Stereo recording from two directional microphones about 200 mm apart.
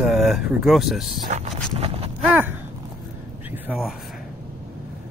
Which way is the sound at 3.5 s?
5° right (ahead or behind).